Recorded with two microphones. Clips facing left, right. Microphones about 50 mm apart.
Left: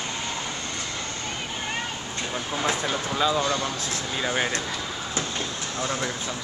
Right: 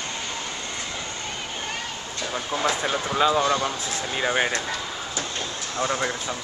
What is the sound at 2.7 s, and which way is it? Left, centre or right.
Speech, centre.